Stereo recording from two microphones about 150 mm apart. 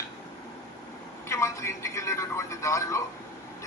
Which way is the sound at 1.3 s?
20° left (ahead or behind).